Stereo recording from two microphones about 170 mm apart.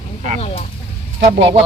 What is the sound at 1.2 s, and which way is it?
Speech, 35° right (ahead or behind).